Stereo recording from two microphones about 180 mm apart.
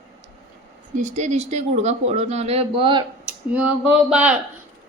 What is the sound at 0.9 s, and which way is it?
Speech, 40° right (ahead or behind).